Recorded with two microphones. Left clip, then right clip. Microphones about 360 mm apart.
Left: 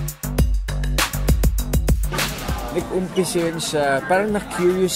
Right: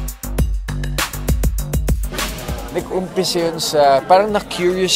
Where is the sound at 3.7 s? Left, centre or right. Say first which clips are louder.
Right 8 dB; right.